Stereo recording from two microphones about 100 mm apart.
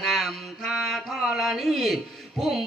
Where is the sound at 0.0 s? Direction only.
Centre (ahead or behind).